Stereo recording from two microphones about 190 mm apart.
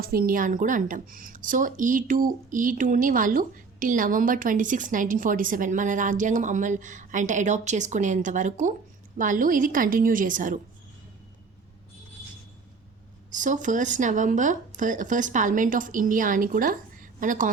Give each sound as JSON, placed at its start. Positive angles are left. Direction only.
{"t": 0.0, "sound": "speech", "side_deg": -50}
{"t": 13.3, "sound": "speech", "side_deg": -40}